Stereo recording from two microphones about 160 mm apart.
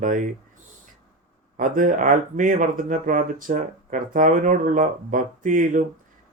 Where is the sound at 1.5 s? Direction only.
55° right (ahead or behind).